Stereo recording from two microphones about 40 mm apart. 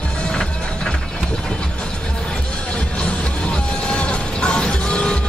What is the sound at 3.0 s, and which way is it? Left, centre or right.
Music, left.